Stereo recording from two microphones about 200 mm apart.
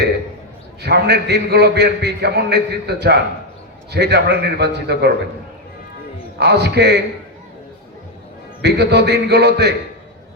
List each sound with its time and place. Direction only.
0.8 s a man's voice: 55° right (ahead or behind)
6.4 s a man's voice: 55° right (ahead or behind)
8.6 s a man's voice: 55° right (ahead or behind)